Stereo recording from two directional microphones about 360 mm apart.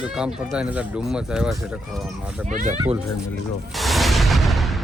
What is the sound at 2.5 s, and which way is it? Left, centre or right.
Speech, right.